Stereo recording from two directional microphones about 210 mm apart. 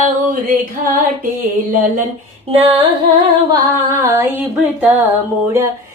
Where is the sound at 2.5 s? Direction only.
25° right (ahead or behind).